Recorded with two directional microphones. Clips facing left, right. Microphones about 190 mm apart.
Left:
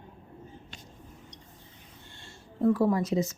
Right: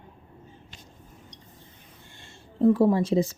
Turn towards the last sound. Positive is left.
turn(degrees=-30)  # may be behind; listen again after turning